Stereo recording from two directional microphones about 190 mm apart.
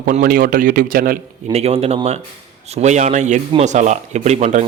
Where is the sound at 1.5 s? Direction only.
35° right (ahead or behind).